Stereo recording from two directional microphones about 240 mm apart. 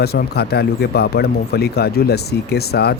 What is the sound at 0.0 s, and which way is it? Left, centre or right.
Speech, left.